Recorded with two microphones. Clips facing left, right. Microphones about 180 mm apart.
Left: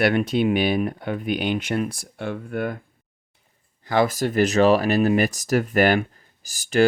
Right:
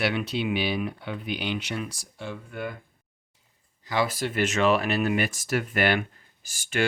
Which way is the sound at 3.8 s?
50° left (ahead or behind).